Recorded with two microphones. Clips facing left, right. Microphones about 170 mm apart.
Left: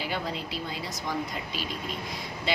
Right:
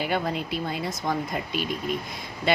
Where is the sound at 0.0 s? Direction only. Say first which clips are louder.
Right 6 dB; 55° right (ahead or behind).